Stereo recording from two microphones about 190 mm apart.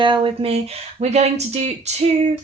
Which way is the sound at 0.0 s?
25° right (ahead or behind).